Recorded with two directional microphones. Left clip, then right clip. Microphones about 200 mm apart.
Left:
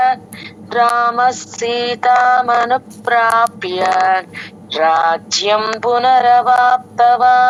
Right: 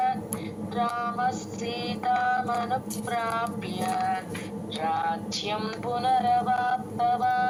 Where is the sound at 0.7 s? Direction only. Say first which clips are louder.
Left 16 dB; 45° left (ahead or behind).